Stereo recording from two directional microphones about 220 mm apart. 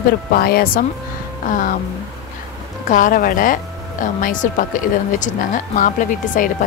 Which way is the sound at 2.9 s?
35° left (ahead or behind).